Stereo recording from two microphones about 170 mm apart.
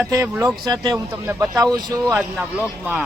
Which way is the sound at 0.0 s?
15° right (ahead or behind).